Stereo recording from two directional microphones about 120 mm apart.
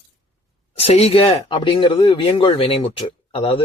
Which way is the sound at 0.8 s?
55° left (ahead or behind).